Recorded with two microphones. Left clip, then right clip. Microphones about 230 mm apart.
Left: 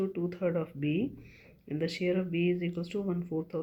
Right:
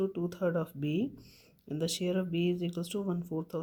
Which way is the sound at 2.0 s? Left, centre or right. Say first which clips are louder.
Left 4 dB; right.